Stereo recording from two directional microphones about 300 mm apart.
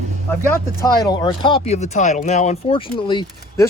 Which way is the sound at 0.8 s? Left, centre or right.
Centre.